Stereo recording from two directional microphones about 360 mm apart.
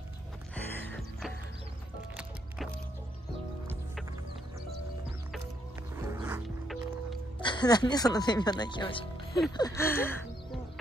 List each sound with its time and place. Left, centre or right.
0.7 s music: centre
5.9 s music: centre
7.3 s speech: centre
9.6 s music: centre